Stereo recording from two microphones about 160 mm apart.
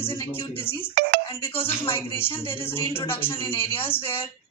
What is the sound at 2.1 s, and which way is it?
Speech, 35° left (ahead or behind).